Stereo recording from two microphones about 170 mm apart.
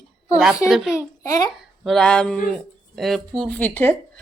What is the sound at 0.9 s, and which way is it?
Speech, 20° left (ahead or behind).